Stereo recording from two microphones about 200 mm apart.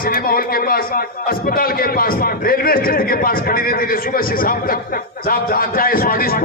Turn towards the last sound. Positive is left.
turn(degrees=50)  # may be behind; listen again after turning